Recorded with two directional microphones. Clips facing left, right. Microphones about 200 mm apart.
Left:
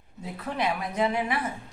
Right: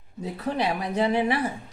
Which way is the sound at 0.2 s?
35° right (ahead or behind).